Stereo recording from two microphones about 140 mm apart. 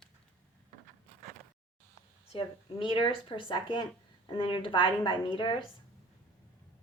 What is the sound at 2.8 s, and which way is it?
A woman's voice, 40° left (ahead or behind).